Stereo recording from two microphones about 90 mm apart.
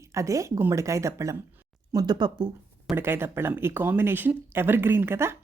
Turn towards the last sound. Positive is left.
turn(degrees=-30)  # may be behind; listen again after turning